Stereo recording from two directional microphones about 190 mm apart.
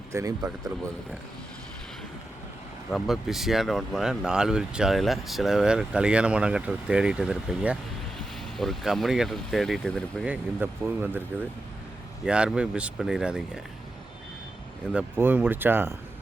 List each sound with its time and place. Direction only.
0.1 s speech: 15° right (ahead or behind)
2.9 s speech: centre (ahead or behind)
10.6 s speech: 10° right (ahead or behind)
12.2 s speech: 5° right (ahead or behind)
14.9 s speech: 10° right (ahead or behind)